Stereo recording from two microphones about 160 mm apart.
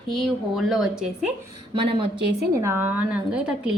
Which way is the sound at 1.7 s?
35° right (ahead or behind).